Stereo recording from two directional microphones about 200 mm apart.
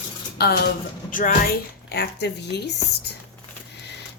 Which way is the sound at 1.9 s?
55° left (ahead or behind).